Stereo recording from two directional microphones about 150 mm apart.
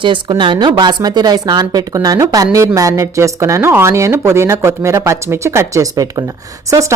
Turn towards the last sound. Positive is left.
turn(degrees=-20)  # may be behind; listen again after turning